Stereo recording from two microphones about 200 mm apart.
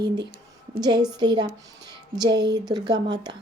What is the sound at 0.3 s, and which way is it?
A woman's voice, 25° right (ahead or behind).